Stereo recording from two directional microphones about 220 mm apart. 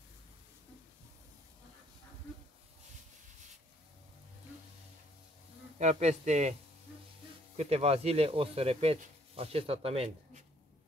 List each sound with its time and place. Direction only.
5.8 s insect: 30° right (ahead or behind)
7.5 s speech: 30° right (ahead or behind)